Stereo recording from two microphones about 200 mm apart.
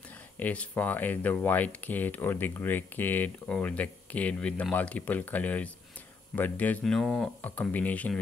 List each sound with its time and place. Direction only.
0.1 s speech: 5° left (ahead or behind)